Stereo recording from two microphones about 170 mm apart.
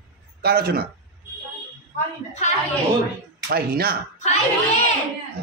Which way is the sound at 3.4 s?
65° right (ahead or behind).